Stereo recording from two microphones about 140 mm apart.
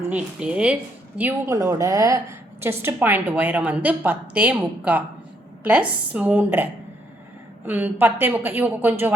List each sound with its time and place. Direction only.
0.1 s a woman's voice: 10° right (ahead or behind)
1.2 s a woman's voice: 20° right (ahead or behind)